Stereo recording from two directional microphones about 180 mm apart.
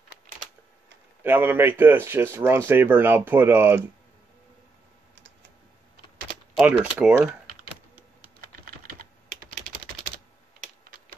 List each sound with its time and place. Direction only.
1.2 s speech: 10° right (ahead or behind)
6.6 s speech: 5° right (ahead or behind)
8.8 s typing: 55° right (ahead or behind)